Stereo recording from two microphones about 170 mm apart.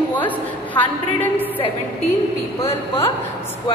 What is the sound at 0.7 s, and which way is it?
Speech, 10° left (ahead or behind).